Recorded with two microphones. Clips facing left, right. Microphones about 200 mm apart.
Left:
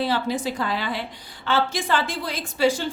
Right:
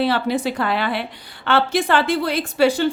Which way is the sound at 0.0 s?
65° right (ahead or behind).